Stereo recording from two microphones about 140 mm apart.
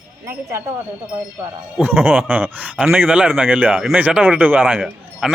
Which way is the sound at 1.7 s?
10° right (ahead or behind).